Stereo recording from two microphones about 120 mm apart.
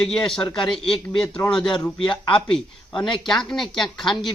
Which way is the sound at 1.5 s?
40° left (ahead or behind).